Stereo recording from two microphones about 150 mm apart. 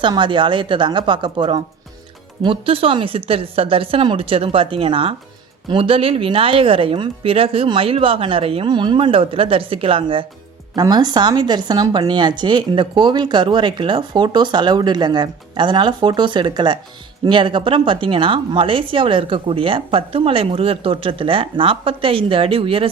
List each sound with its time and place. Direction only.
0.0 s speech: 30° right (ahead or behind)